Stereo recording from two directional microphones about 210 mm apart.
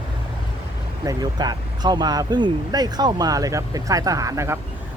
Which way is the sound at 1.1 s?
20° right (ahead or behind).